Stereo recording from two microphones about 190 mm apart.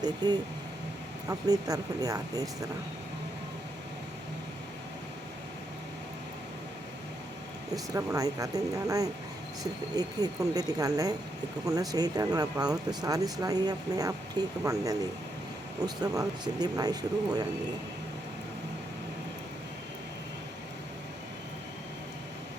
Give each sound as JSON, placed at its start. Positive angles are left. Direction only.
{"t": 0.0, "sound": "speech", "side_deg": -20}
{"t": 7.9, "sound": "speech", "side_deg": -15}
{"t": 16.0, "sound": "speech", "side_deg": -20}